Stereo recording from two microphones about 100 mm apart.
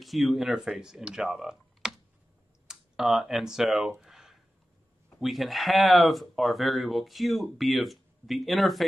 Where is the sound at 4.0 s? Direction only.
5° right (ahead or behind).